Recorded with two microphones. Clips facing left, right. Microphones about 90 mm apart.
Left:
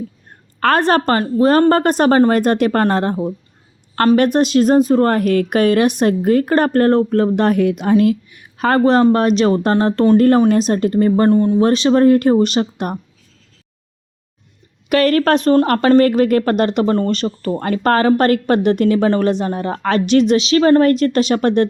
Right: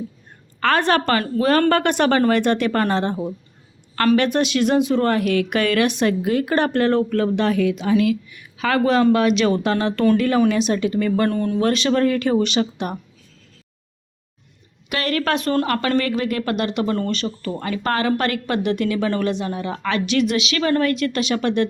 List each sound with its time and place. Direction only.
0.3 s a sound: 50° left (ahead or behind)
1.2 s speech: 30° left (ahead or behind)
7.3 s speech: 50° left (ahead or behind)
8.8 s speech: 35° left (ahead or behind)
10.2 s speech: 45° left (ahead or behind)
11.3 s speech: 20° left (ahead or behind)
11.6 s speech: 35° left (ahead or behind)
14.8 s speech: 45° left (ahead or behind)